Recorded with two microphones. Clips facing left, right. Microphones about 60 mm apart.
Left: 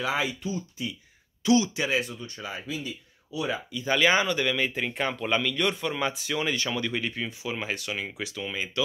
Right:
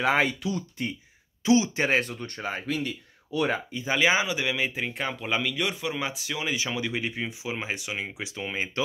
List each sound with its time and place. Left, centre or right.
0.0 s speech: right
0.4 s speech: right
1.4 s speech: right
1.8 s speech: right
3.8 s speech: centre; by 8.8 s right